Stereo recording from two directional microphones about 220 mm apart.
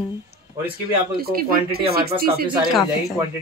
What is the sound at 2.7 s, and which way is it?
Speech, centre (ahead or behind).